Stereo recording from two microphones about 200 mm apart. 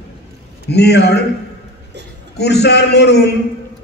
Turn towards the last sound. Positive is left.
turn(degrees=55)  # may be behind; listen again after turning